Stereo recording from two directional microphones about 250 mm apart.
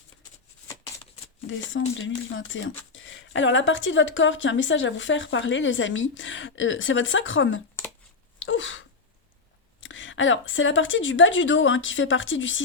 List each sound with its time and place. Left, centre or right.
1.5 s speech: left
8.4 s sneeze: left
9.8 s speech: left